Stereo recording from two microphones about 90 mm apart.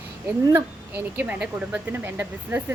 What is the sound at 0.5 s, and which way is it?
Speech, 20° right (ahead or behind).